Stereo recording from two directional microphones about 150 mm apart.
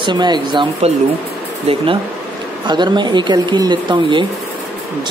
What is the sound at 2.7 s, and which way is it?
Speech, 30° right (ahead or behind).